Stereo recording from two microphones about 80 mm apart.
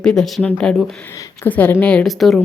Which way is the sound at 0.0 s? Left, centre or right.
Centre.